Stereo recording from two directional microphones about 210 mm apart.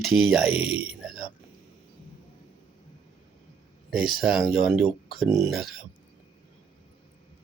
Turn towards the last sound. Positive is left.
turn(degrees=0)  # may be behind; listen again after turning